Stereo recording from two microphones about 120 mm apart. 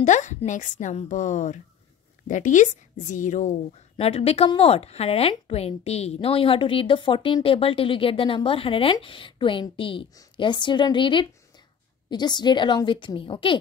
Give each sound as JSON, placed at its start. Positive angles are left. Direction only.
{"t": 0.0, "sound": "a woman's voice", "side_deg": 80}
{"t": 3.9, "sound": "a woman's voice", "side_deg": 55}